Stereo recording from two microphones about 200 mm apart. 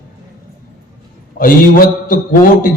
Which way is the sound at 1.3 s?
45° left (ahead or behind).